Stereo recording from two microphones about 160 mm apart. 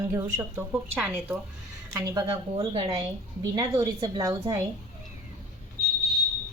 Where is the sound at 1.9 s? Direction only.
20° right (ahead or behind).